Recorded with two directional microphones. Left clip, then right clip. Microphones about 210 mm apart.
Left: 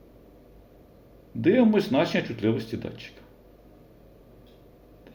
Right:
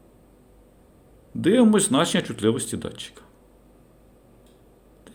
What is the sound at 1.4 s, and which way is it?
A man's voice, 45° right (ahead or behind).